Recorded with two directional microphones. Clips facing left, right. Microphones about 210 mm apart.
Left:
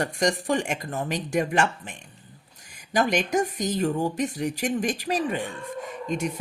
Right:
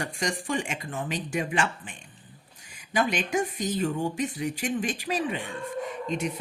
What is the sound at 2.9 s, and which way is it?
A woman's voice, 40° left (ahead or behind).